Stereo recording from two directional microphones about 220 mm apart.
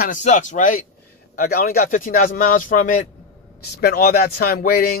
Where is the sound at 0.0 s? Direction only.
35° left (ahead or behind).